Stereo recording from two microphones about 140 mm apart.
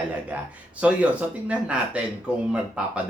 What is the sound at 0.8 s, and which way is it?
Speech, 10° right (ahead or behind).